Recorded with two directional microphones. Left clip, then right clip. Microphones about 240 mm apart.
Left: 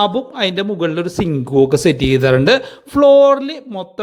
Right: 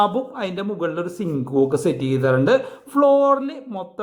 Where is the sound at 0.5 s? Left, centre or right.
Left.